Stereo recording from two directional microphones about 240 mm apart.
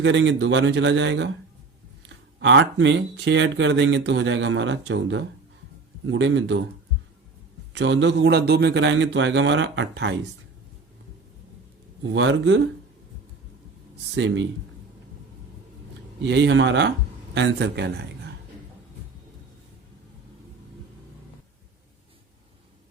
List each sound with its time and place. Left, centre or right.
0.0 s speech: right
2.4 s speech: right
7.7 s speech: right
12.1 s speech: right
14.2 s speech: right
16.2 s speech: right